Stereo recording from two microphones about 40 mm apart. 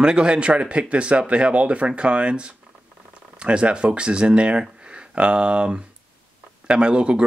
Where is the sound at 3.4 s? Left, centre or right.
Right.